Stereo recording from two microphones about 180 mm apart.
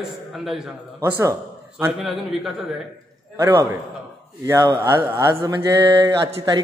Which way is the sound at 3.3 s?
20° right (ahead or behind).